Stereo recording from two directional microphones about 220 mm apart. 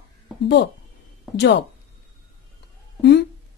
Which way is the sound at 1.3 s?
50° left (ahead or behind).